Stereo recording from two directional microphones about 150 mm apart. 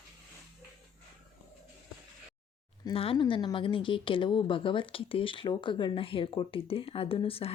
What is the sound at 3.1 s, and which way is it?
Speech, 30° left (ahead or behind).